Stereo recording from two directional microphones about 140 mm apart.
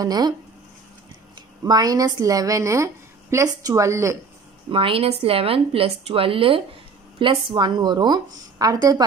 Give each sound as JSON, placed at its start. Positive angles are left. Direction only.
{"t": 0.0, "sound": "a woman's voice", "side_deg": -30}
{"t": 1.6, "sound": "a woman's voice", "side_deg": -25}
{"t": 4.6, "sound": "a woman's voice", "side_deg": -40}